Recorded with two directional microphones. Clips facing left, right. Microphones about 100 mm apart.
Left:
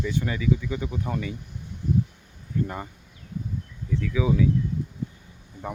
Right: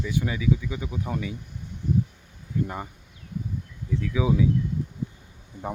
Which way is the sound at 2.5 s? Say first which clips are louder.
Even; 10° right (ahead or behind).